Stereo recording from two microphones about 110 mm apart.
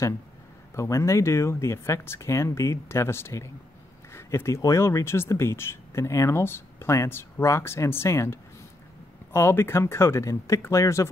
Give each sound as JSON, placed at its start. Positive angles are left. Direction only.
{"t": 0.7, "sound": "speech", "side_deg": 25}